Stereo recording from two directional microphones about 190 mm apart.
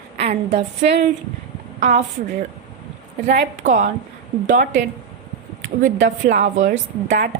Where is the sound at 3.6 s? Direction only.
40° right (ahead or behind).